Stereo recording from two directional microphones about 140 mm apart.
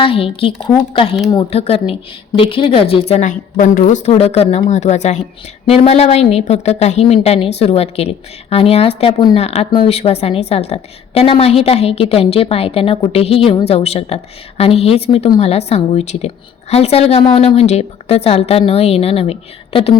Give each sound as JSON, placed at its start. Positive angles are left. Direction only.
{"t": 0.0, "sound": "a woman's voice", "side_deg": 40}
{"t": 3.2, "sound": "a woman's voice", "side_deg": 65}
{"t": 4.1, "sound": "a woman's voice", "side_deg": 45}
{"t": 5.6, "sound": "a woman's voice", "side_deg": 45}